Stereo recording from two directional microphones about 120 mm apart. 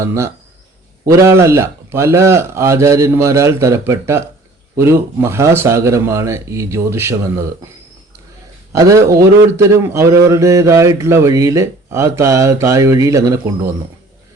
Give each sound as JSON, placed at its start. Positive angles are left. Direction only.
{"t": 0.0, "sound": "a man's voice", "side_deg": -25}
{"t": 8.7, "sound": "a man's voice", "side_deg": -25}